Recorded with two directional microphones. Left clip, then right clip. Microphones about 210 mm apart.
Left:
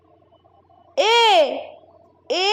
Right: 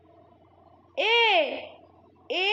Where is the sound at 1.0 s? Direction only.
35° left (ahead or behind).